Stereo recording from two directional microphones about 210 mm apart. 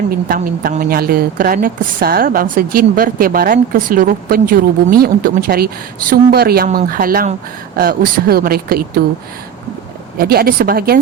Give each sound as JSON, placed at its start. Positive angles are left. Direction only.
{"t": 0.1, "sound": "a woman's voice", "side_deg": -45}
{"t": 10.2, "sound": "a woman's voice", "side_deg": -45}